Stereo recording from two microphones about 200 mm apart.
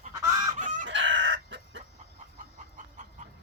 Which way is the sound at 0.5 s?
40° right (ahead or behind).